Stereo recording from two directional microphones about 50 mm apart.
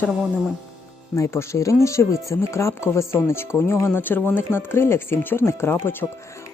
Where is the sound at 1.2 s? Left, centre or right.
Left.